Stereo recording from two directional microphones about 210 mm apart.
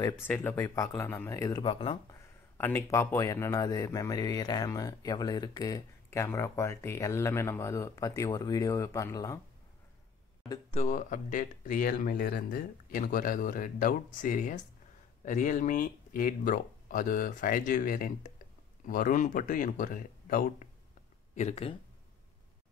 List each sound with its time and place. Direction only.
0.3 s speech: 10° left (ahead or behind)
2.0 s speech: 10° left (ahead or behind)
10.7 s speech: 35° left (ahead or behind)
21.4 s speech: 30° left (ahead or behind)